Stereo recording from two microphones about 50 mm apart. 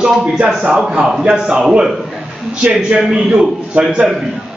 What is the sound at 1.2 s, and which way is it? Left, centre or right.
Speech, right.